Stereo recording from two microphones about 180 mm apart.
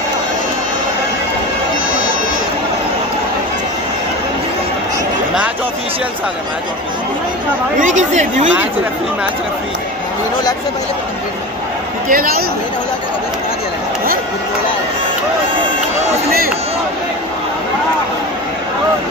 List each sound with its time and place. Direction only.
7.8 s speech: 40° right (ahead or behind)
12.1 s speech: 55° right (ahead or behind)